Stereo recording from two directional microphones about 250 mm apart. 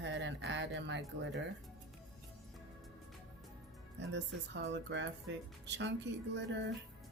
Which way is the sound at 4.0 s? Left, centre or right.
Right.